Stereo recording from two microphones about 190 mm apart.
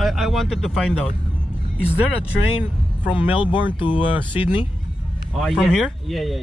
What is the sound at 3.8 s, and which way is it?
Speech, 25° left (ahead or behind).